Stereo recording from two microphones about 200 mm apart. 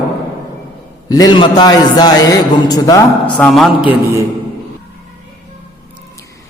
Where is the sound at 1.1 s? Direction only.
20° left (ahead or behind).